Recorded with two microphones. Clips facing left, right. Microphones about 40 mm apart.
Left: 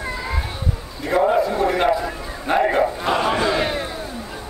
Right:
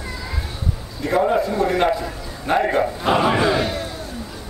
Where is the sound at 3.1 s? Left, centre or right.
Centre.